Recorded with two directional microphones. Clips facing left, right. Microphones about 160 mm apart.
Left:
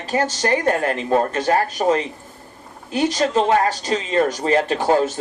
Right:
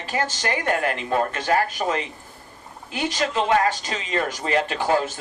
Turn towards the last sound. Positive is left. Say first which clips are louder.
# left 4 dB
turn(degrees=35)  # may be behind; listen again after turning